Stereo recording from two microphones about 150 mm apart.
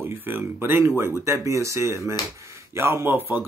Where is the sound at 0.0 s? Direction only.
15° right (ahead or behind).